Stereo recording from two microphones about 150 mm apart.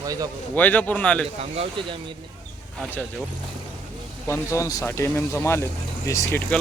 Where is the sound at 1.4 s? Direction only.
40° right (ahead or behind).